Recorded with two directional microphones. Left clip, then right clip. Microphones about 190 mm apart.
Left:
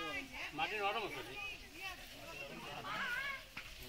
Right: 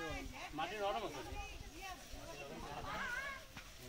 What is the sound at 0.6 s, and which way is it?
Speech, 30° right (ahead or behind).